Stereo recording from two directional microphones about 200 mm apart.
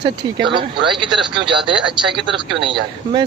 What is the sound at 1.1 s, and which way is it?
Speech, centre (ahead or behind).